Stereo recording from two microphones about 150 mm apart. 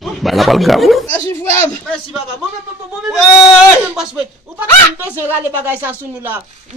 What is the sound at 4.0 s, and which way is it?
Speech, 10° right (ahead or behind).